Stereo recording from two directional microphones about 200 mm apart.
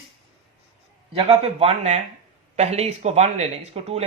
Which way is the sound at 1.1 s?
30° right (ahead or behind).